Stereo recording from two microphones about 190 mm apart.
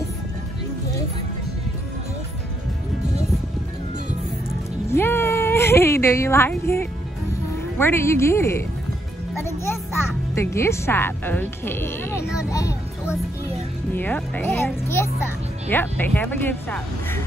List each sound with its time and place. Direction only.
4.8 s a sound: 15° left (ahead or behind)
7.8 s speech: 15° left (ahead or behind)
10.3 s a child's voice: 15° left (ahead or behind)